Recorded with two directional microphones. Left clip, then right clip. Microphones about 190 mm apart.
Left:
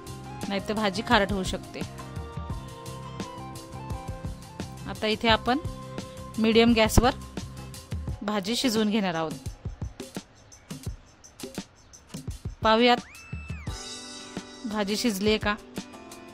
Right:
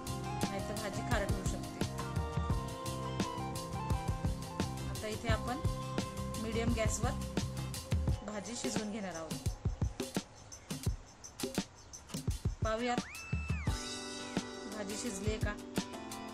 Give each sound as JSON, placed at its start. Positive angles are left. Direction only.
{"t": 0.0, "sound": "music", "side_deg": 0}
{"t": 0.8, "sound": "speech", "side_deg": 55}
{"t": 1.2, "sound": "music", "side_deg": 0}
{"t": 5.0, "sound": "speech", "side_deg": 55}
{"t": 5.7, "sound": "music", "side_deg": 0}
{"t": 6.4, "sound": "speech", "side_deg": 60}
{"t": 7.3, "sound": "music", "side_deg": 0}
{"t": 8.3, "sound": "speech", "side_deg": 55}
{"t": 10.2, "sound": "music", "side_deg": 0}
{"t": 11.4, "sound": "music", "side_deg": 0}
{"t": 12.6, "sound": "speech", "side_deg": 55}
{"t": 13.7, "sound": "music", "side_deg": 0}
{"t": 14.8, "sound": "speech", "side_deg": 55}
{"t": 15.7, "sound": "music", "side_deg": 0}